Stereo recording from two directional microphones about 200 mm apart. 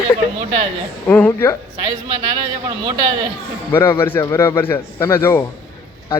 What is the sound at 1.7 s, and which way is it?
A man's voice, 25° right (ahead or behind).